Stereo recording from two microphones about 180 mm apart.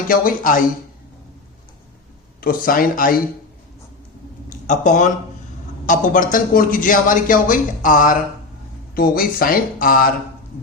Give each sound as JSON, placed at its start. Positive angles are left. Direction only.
{"t": 0.1, "sound": "a man's voice", "side_deg": 50}
{"t": 2.4, "sound": "a man's voice", "side_deg": 50}
{"t": 4.4, "sound": "a man's voice", "side_deg": 45}